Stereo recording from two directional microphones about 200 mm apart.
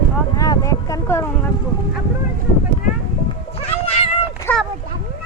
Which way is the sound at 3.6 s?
30° left (ahead or behind).